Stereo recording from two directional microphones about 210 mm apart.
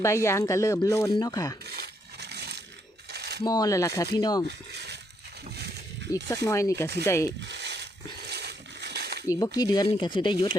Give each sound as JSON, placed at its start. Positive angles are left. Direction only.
{"t": 0.0, "sound": "speech", "side_deg": 15}
{"t": 1.6, "sound": "crumpling", "side_deg": -50}
{"t": 3.1, "sound": "coin", "side_deg": -50}
{"t": 3.4, "sound": "speech", "side_deg": 20}
{"t": 4.4, "sound": "speech", "side_deg": -55}
{"t": 5.5, "sound": "a sound", "side_deg": -50}
{"t": 6.2, "sound": "speech", "side_deg": 15}
{"t": 7.4, "sound": "a sound", "side_deg": -55}
{"t": 9.2, "sound": "speech", "side_deg": 15}